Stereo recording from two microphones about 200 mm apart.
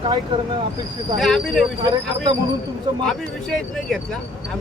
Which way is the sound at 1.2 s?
Centre (ahead or behind).